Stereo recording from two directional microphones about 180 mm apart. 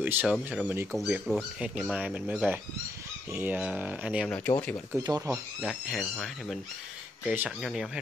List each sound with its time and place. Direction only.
0.0 s speech: 10° right (ahead or behind)
4.3 s speech: 5° left (ahead or behind)
4.9 s speech: 20° right (ahead or behind)
5.3 s speech: centre (ahead or behind)